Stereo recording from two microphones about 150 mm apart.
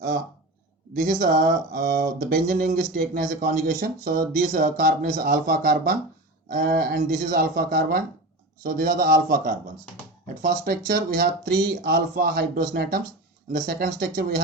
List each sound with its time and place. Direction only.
1.2 s speech: 60° right (ahead or behind)
5.2 s a man's voice: 75° right (ahead or behind)
13.5 s speech: 70° right (ahead or behind)
14.2 s speech: 90° right